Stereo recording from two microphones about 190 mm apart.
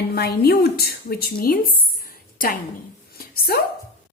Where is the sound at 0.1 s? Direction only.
55° left (ahead or behind).